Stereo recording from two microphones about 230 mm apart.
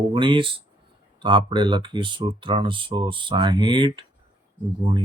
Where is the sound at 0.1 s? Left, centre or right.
Right.